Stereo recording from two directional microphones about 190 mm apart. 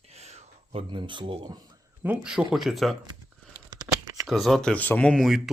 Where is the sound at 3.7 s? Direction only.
20° right (ahead or behind).